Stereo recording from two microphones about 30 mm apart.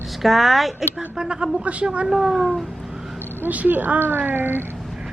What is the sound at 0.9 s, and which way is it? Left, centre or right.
Speech, right.